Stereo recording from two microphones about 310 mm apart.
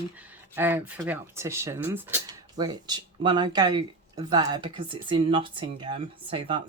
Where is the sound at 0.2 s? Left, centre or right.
Centre.